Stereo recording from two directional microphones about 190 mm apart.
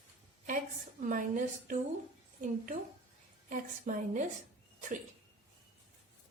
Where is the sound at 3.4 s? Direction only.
45° right (ahead or behind).